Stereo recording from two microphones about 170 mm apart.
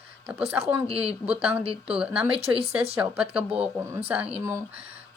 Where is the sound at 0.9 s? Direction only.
5° right (ahead or behind).